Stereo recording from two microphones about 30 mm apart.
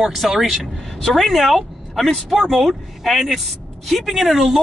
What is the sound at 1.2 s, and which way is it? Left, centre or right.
Speech, centre.